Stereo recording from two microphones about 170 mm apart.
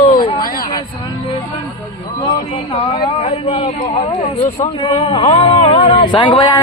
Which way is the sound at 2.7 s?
35° left (ahead or behind).